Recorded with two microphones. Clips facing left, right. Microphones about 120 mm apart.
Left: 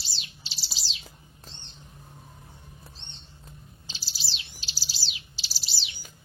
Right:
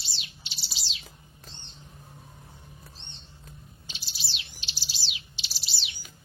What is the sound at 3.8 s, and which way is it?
Bird, 30° left (ahead or behind).